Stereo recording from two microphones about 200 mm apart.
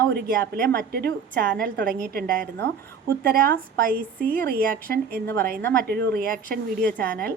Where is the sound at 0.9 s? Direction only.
50° right (ahead or behind).